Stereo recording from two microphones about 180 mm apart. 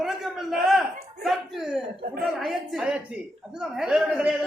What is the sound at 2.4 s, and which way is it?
A man's voice, centre (ahead or behind).